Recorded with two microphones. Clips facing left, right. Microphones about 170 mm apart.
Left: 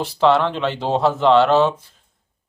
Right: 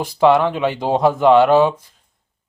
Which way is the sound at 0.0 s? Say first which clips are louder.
Right 2 dB; 10° right (ahead or behind).